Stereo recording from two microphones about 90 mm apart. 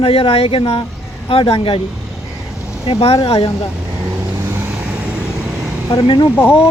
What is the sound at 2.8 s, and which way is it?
Speech, 90° left.